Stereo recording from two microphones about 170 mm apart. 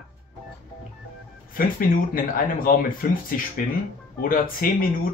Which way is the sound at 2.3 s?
55° left (ahead or behind).